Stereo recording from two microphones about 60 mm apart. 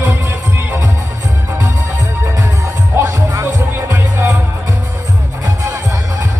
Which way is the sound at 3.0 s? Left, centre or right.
Right.